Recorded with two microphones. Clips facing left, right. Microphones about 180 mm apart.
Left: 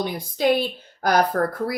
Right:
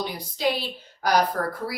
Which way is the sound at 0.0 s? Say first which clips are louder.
Left 4 dB; 50° left (ahead or behind).